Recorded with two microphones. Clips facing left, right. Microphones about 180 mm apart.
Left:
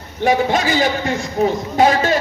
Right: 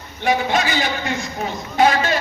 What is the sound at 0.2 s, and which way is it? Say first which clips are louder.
A man's voice: left 3 dB; 45° left (ahead or behind).